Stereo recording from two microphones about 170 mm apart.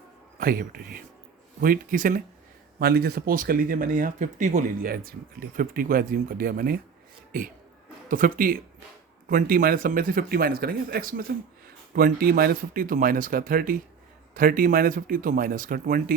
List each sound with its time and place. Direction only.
0.3 s speech: 60° right (ahead or behind)
2.7 s speech: 65° right (ahead or behind)
8.1 s speech: 55° right (ahead or behind)